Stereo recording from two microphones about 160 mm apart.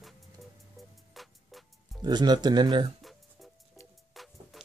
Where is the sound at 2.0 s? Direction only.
25° right (ahead or behind).